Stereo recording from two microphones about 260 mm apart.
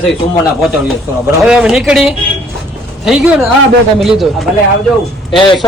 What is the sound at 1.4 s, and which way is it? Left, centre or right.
Speech, centre.